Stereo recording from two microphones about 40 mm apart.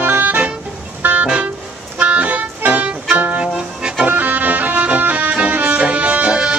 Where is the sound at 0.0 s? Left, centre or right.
Right.